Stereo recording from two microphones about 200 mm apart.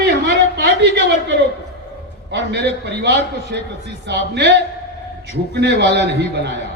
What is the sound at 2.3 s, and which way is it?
A man's voice, 60° right (ahead or behind).